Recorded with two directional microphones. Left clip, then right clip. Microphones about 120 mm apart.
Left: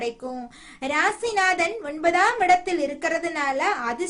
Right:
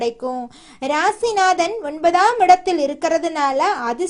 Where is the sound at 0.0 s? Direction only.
40° right (ahead or behind).